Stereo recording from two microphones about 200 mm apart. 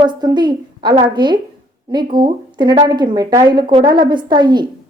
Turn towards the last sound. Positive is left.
turn(degrees=-20)  # may be behind; listen again after turning